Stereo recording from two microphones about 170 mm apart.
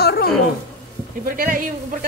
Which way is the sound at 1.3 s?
55° right (ahead or behind).